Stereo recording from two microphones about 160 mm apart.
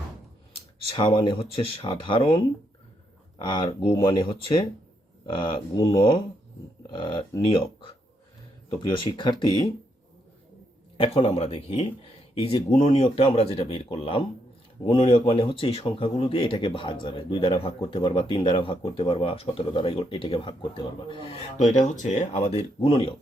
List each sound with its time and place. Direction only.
0.9 s speech: 30° left (ahead or behind)
9.0 s speech: 30° left (ahead or behind)
10.9 s speech: 35° left (ahead or behind)